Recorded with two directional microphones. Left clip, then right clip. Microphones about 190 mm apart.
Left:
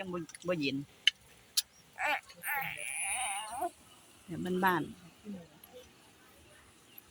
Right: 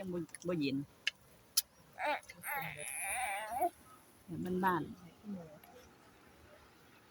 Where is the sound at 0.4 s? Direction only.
5° left (ahead or behind).